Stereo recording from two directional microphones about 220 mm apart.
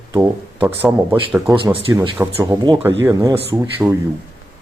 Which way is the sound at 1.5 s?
20° right (ahead or behind).